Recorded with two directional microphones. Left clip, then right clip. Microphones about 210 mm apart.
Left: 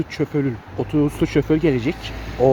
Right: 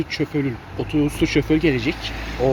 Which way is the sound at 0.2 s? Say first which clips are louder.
Left 4 dB; 55° left (ahead or behind).